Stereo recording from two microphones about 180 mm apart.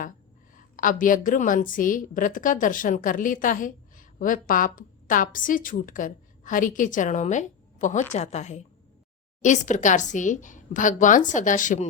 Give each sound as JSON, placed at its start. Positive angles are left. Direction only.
{"t": 0.8, "sound": "a woman's voice", "side_deg": 50}